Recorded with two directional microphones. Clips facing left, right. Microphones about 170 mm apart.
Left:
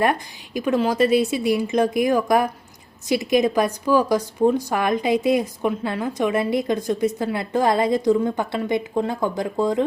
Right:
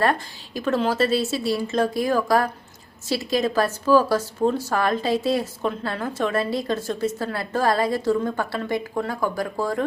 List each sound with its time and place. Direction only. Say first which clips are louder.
0.0 s a woman's voice: left 1 dB; 15° left (ahead or behind)